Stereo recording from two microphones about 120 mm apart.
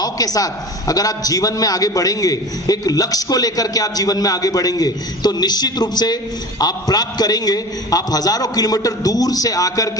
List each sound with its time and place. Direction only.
0.0 s a man's voice: 30° left (ahead or behind)